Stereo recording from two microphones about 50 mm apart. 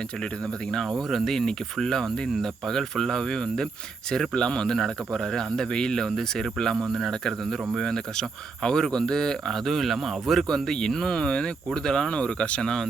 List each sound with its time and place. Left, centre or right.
0.9 s speech: centre
10.7 s speech: centre